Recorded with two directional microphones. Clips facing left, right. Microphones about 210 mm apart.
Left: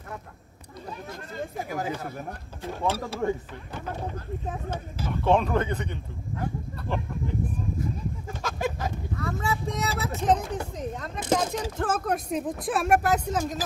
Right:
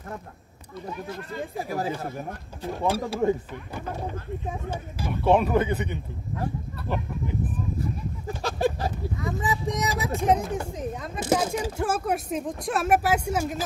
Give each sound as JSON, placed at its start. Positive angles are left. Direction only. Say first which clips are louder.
{"t": 1.6, "sound": "speech", "louder": "right 2 dB", "side_deg": -35}
{"t": 2.8, "sound": "speech", "louder": "right 3 dB", "side_deg": -15}
{"t": 4.5, "sound": "speech", "louder": "left 1 dB", "side_deg": -10}
{"t": 8.4, "sound": "a sound", "louder": "right 5 dB", "side_deg": -35}
{"t": 9.2, "sound": "speech", "louder": "right 1 dB", "side_deg": -15}